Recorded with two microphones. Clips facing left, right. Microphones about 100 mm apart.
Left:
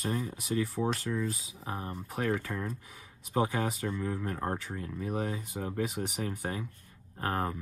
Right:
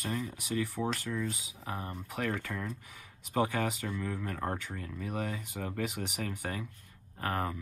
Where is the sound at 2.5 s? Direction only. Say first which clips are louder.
Left 2 dB; 35° left (ahead or behind).